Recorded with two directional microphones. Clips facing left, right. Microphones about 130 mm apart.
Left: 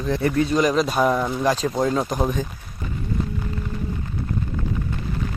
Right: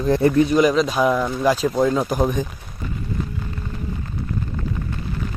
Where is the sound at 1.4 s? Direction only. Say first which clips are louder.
Right 4 dB; 10° right (ahead or behind).